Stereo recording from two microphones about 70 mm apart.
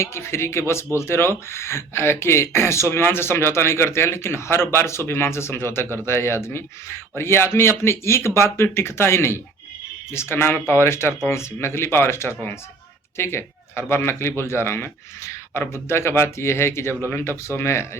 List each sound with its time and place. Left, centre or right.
0.0 s speech: left